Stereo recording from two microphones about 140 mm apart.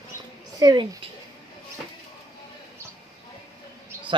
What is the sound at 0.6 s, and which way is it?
Speech, 30° right (ahead or behind).